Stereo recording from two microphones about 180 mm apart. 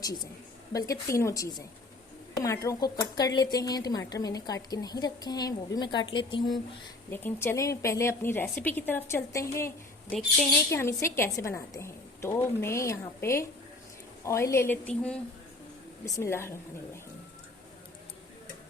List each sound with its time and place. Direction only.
0.7 s speech: 20° left (ahead or behind)
7.1 s a woman's voice: 10° left (ahead or behind)
16.0 s a woman's voice: 15° left (ahead or behind)